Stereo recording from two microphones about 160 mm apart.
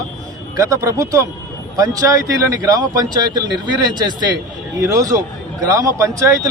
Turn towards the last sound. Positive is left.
turn(degrees=-20)  # may be behind; listen again after turning